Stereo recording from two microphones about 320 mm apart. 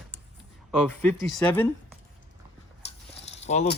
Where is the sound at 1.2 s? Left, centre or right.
Centre.